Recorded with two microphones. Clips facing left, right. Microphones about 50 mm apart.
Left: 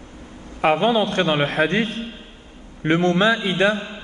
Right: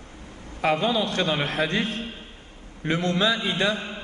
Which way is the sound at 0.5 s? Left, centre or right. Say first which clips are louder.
Left 5 dB; left.